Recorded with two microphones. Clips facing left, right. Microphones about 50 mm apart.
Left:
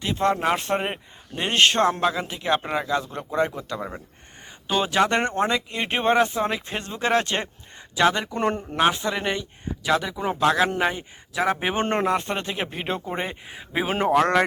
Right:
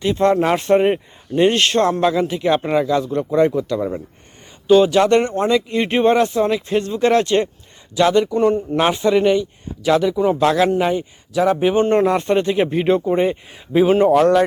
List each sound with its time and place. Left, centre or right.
0.0 s speech: centre
1.5 s speech: centre
8.4 s speech: left
8.9 s speech: centre
12.1 s speech: centre
13.9 s speech: left